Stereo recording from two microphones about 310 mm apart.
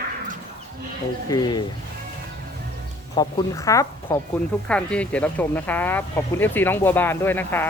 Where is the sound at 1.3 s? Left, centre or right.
Centre.